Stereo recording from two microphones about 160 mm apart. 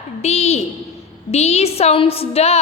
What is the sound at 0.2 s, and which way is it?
A woman's voice, 40° left (ahead or behind).